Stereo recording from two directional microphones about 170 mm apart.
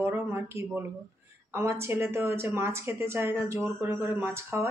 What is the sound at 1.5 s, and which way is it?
Speech, 15° right (ahead or behind).